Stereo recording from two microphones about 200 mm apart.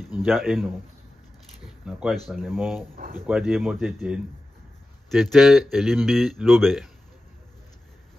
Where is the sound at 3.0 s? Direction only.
40° right (ahead or behind).